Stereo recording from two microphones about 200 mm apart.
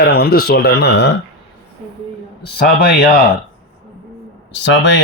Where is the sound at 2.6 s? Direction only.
50° left (ahead or behind).